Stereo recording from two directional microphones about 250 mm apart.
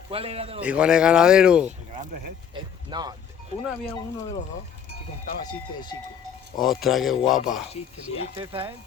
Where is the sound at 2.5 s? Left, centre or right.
Centre.